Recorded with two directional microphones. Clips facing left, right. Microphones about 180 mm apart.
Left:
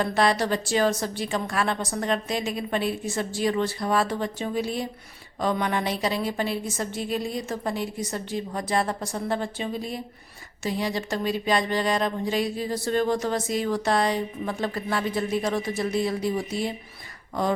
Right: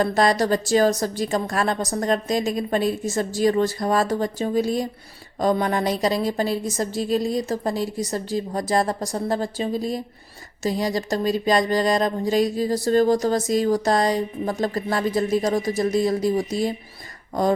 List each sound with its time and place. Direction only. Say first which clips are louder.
0.0 s speech: right 3 dB; 40° right (ahead or behind)